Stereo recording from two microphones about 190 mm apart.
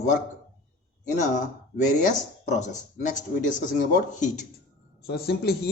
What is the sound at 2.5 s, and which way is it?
Speech, 40° left (ahead or behind).